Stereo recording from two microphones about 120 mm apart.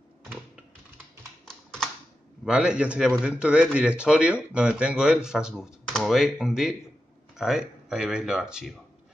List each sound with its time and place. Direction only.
2.4 s speech: 5° right (ahead or behind)